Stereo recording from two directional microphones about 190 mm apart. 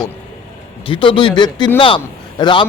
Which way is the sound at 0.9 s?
25° left (ahead or behind).